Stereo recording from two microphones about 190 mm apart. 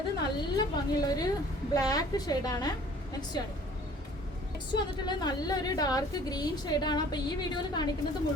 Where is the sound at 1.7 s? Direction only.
20° left (ahead or behind).